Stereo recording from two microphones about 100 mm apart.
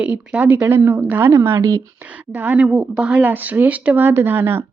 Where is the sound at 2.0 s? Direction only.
15° right (ahead or behind).